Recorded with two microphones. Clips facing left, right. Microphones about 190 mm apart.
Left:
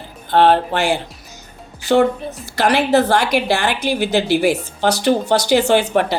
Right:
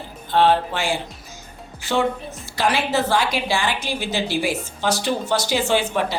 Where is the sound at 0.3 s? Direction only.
65° left (ahead or behind).